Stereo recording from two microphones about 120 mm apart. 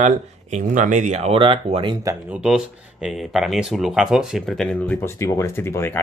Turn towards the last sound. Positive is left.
turn(degrees=20)  # may be behind; listen again after turning